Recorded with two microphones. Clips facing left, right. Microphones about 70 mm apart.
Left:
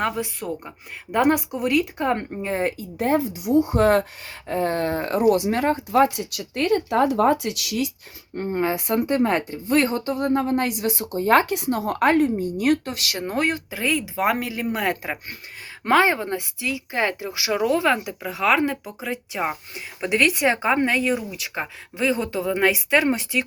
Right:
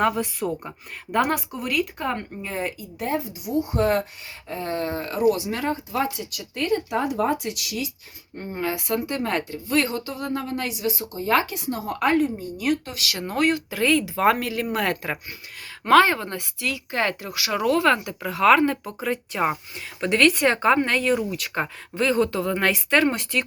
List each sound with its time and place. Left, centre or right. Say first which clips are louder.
0.0 s speech: right 3 dB; centre
2.1 s speech: left 4 dB; left
8.6 s speech: left 2 dB; left
13.1 s speech: right 2 dB; left; by 23.4 s centre